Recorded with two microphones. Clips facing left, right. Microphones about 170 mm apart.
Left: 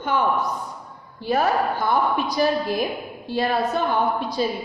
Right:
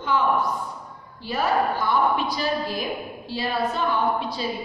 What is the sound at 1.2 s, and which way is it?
A woman's voice, 50° left (ahead or behind).